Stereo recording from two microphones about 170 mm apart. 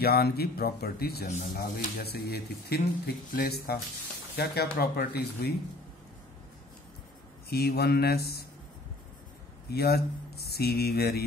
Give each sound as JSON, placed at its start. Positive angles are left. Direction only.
{"t": 0.0, "sound": "speech", "side_deg": 65}
{"t": 7.4, "sound": "speech", "side_deg": 65}
{"t": 9.7, "sound": "speech", "side_deg": 70}